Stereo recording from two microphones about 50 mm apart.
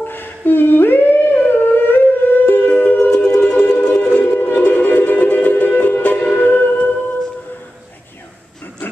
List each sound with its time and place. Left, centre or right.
0.1 s humming: left
3.1 s music: centre
4.1 s a sound: left
4.6 s music: left